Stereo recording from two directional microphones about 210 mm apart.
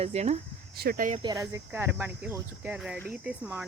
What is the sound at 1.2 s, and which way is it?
Speech, 20° right (ahead or behind).